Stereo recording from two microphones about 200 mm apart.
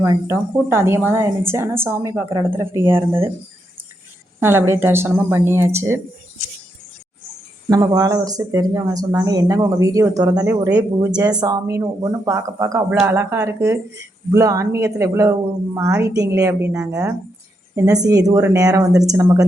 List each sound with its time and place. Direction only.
0.0 s speech: 10° right (ahead or behind)
4.4 s speech: 10° right (ahead or behind)
7.7 s speech: 20° right (ahead or behind)